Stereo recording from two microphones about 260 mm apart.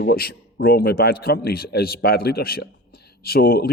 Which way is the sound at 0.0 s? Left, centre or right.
Left.